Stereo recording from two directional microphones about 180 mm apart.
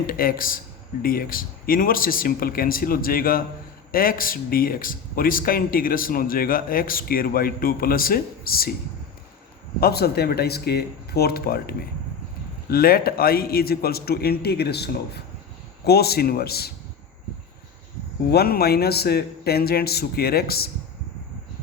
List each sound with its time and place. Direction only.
0.1 s speech: 50° left (ahead or behind)
9.8 s a man's voice: 60° left (ahead or behind)
18.3 s a man's voice: 60° left (ahead or behind)